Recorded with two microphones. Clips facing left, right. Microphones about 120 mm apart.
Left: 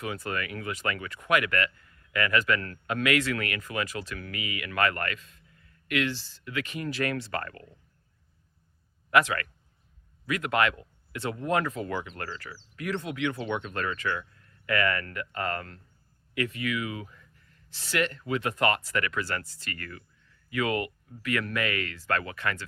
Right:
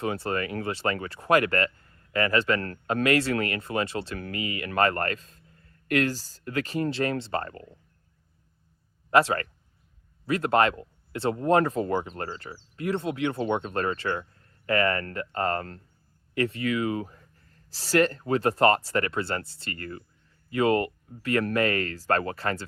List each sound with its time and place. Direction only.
0.0 s speech: 30° right (ahead or behind)
9.0 s a man's voice: 30° right (ahead or behind)